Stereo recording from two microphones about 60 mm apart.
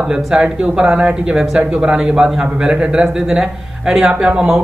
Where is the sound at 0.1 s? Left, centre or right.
Centre.